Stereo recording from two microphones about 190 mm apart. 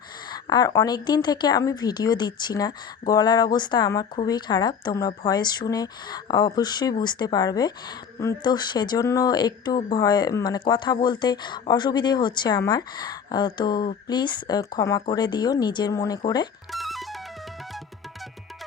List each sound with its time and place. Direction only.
0.3 s speech: 20° left (ahead or behind)
16.7 s music: centre (ahead or behind)